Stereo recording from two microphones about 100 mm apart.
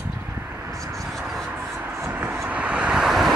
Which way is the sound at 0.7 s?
35° right (ahead or behind).